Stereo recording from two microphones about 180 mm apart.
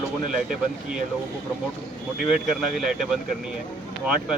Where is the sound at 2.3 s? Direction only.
Centre (ahead or behind).